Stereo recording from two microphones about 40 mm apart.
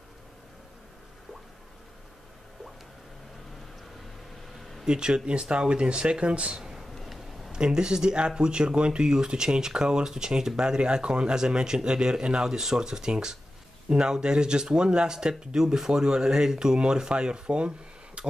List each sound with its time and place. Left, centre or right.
4.8 s speech: right
7.0 s a sound: centre
7.5 s speech: centre